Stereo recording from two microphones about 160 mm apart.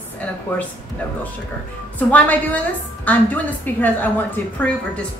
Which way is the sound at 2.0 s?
10° left (ahead or behind).